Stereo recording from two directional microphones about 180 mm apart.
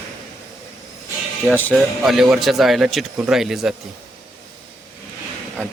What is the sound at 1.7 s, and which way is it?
Speech, centre (ahead or behind).